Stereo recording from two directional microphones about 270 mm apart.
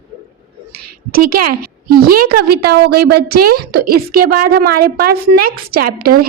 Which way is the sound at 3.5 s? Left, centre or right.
Right.